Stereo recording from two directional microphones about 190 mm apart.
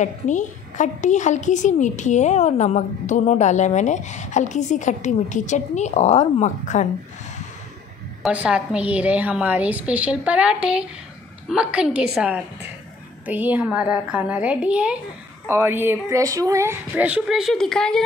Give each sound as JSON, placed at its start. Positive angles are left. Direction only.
{"t": 0.0, "sound": "a woman's voice", "side_deg": 40}
{"t": 8.2, "sound": "a woman's voice", "side_deg": -5}